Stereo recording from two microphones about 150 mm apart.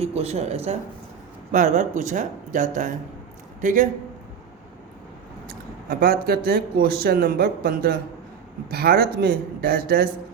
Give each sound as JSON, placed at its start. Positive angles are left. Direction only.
{"t": 0.0, "sound": "speech", "side_deg": -45}
{"t": 5.5, "sound": "speech", "side_deg": -80}